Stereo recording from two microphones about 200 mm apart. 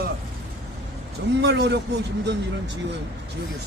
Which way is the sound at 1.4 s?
60° right (ahead or behind).